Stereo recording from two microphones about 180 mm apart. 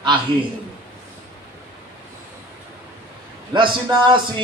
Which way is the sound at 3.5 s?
25° right (ahead or behind).